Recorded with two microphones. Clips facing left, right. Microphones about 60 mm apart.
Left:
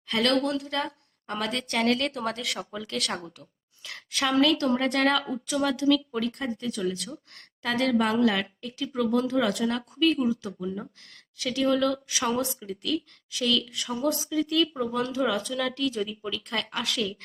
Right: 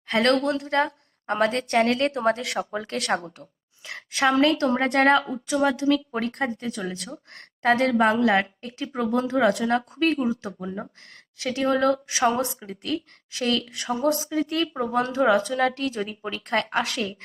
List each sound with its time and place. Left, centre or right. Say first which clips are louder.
0.1 s speech: right 4 dB; right
0.3 s speech: right 4 dB; right
2.4 s speech: right 5 dB; right
2.7 s a woman's voice: right 4 dB; right
4.1 s a woman's voice: right 3 dB; right
4.5 s speech: right 3 dB; right
7.6 s speech: right 5 dB; right
11.3 s a woman's voice: right 2 dB; right
11.6 s speech: right 3 dB; right
12.2 s speech: right 5 dB; right
12.9 s a woman's voice: right 1 dB; right
13.6 s speech: right 3 dB; right
16.2 s speech: right 5 dB; right